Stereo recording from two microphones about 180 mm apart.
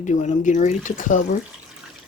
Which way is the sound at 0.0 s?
45° left (ahead or behind).